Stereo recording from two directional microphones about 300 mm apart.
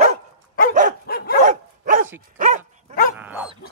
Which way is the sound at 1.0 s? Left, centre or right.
Left.